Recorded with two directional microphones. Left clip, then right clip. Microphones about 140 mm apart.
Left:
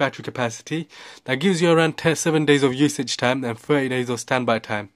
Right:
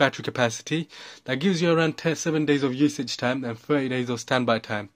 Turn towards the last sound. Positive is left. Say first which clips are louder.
# left 2 dB
turn(degrees=15)  # may be behind; listen again after turning